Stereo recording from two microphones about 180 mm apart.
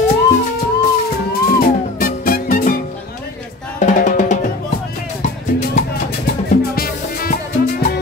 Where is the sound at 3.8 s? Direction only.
45° left (ahead or behind).